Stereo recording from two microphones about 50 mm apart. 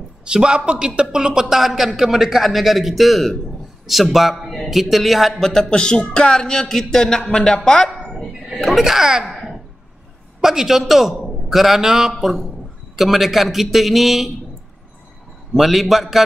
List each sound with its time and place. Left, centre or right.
0.2 s a man's voice: centre
5.3 s speech: centre
8.6 s a man's voice: centre
9.3 s a sound: centre
10.4 s a man's voice: centre
15.5 s a man's voice: centre